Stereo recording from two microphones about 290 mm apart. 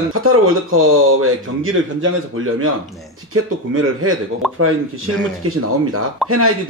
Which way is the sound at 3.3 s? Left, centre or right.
Right.